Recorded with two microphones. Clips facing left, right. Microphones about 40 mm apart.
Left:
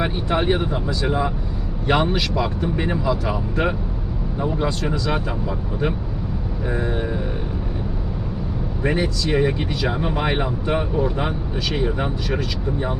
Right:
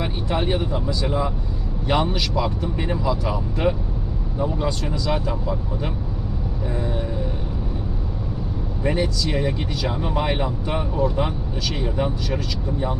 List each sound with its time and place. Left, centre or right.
0.0 s speech: left
6.7 s a sound: left
8.8 s speech: centre